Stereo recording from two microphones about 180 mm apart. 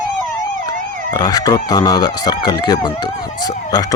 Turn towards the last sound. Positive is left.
turn(degrees=20)  # may be behind; listen again after turning